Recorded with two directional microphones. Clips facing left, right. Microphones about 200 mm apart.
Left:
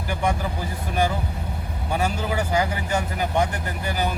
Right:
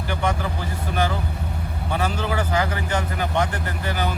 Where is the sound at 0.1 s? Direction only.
10° left (ahead or behind).